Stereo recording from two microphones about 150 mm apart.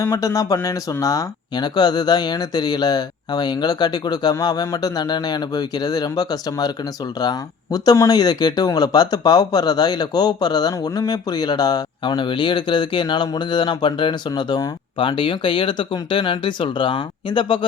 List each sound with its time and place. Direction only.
0.0 s speech: 20° left (ahead or behind)